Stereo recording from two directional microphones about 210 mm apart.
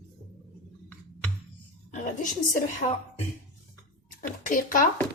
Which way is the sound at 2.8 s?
40° left (ahead or behind).